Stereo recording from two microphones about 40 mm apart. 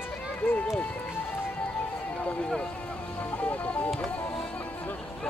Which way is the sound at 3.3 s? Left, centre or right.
Left.